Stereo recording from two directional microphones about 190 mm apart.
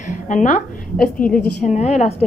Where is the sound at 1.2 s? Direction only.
5° left (ahead or behind).